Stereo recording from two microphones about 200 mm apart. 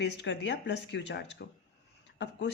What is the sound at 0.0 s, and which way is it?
A woman's voice, 60° left (ahead or behind).